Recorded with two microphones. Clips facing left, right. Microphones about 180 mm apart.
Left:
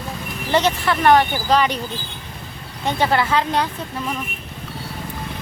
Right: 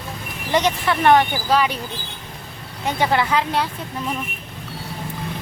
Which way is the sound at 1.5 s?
5° right (ahead or behind).